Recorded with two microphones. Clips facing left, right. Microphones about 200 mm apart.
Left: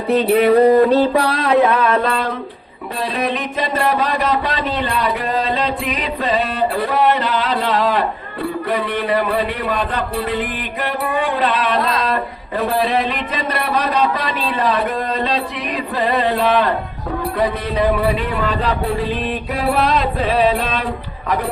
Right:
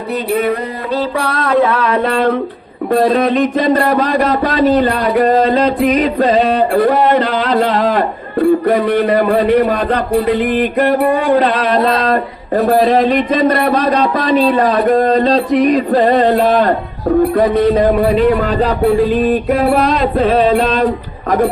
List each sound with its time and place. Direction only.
0.9 s music: 25° left (ahead or behind)
1.6 s speech: 10° left (ahead or behind)
2.9 s speech: 50° right (ahead or behind)
19.8 s music: centre (ahead or behind)
20.1 s speech: 45° right (ahead or behind)